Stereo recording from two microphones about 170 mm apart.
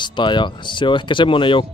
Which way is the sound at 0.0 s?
25° left (ahead or behind).